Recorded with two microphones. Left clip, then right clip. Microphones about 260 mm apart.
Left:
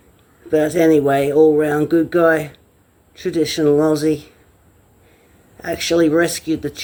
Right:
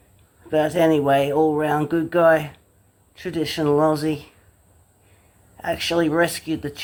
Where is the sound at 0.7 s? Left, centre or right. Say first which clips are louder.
Left 3 dB; right.